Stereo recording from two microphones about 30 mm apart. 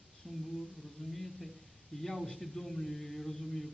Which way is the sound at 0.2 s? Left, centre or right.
Left.